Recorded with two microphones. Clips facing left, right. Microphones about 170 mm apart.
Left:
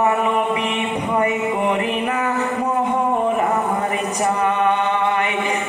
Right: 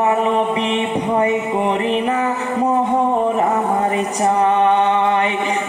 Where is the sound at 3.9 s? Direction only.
30° right (ahead or behind).